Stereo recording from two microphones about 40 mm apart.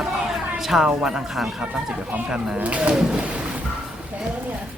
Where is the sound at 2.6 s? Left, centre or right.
Right.